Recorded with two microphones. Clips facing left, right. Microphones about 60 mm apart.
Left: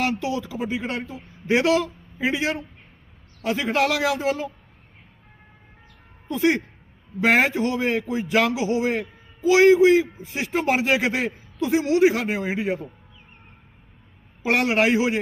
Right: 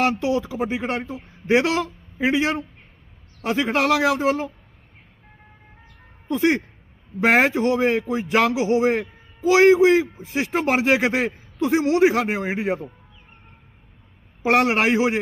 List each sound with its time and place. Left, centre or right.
0.0 s a man's voice: right
7.2 s a man's voice: right
7.5 s a man's voice: right
8.5 s a man's voice: right
14.4 s a man's voice: right